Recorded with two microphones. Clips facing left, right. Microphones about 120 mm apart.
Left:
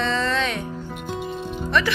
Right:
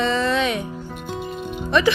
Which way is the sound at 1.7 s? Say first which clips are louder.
Right 5 dB; 15° right (ahead or behind).